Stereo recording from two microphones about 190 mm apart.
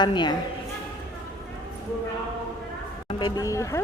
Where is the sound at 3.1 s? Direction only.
20° left (ahead or behind).